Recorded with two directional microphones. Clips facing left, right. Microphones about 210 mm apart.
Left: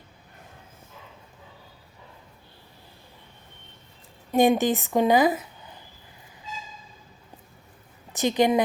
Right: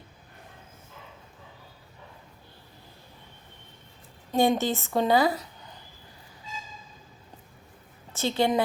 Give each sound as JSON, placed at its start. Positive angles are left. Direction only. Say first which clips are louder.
{"t": 4.3, "sound": "a woman's voice", "louder": "left 4 dB", "side_deg": 15}
{"t": 8.1, "sound": "speech", "louder": "left 4 dB", "side_deg": 15}